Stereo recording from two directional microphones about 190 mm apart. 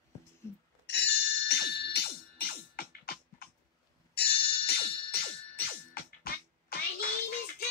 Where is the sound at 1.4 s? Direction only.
60° left (ahead or behind).